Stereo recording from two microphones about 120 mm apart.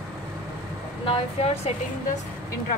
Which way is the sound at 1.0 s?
60° left (ahead or behind).